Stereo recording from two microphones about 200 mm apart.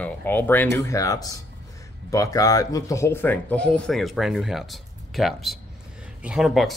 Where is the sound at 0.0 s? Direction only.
10° left (ahead or behind).